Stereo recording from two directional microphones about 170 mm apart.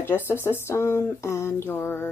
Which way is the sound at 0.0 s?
15° left (ahead or behind).